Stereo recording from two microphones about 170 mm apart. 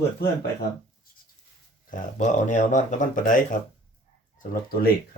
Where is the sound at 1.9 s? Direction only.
50° left (ahead or behind).